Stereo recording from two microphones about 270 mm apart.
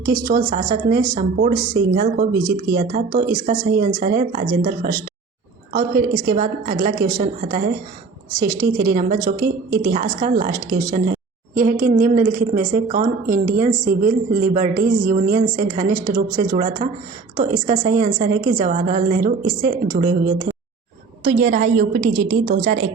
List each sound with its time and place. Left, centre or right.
0.0 s a woman's voice: right
5.7 s a woman's voice: right
8.6 s a woman's voice: right
22.3 s a woman's voice: right